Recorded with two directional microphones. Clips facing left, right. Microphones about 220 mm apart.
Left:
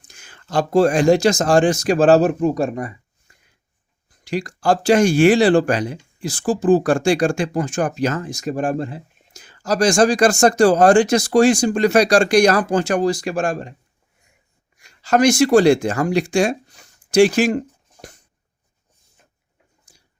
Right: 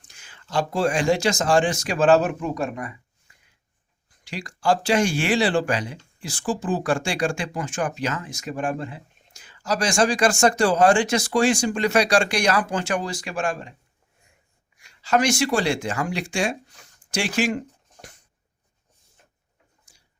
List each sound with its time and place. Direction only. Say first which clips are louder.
0.2 s speech: left 4 dB; 45° left (ahead or behind)
3.3 s a sound: left 4 dB; 40° left (ahead or behind)
4.2 s speech: left 7 dB; 40° left (ahead or behind)
14.8 s speech: left 5 dB; 40° left (ahead or behind)